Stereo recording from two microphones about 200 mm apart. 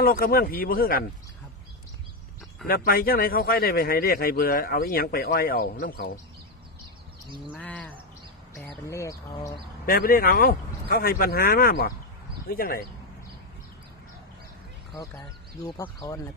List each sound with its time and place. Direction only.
0.0 s speech: 45° left (ahead or behind)
2.6 s speech: 50° left (ahead or behind)
7.5 s speech: 5° left (ahead or behind)
9.8 s speech: 45° left (ahead or behind)
15.8 s speech: 15° left (ahead or behind)